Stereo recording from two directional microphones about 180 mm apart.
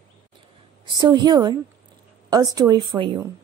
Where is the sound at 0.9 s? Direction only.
25° right (ahead or behind).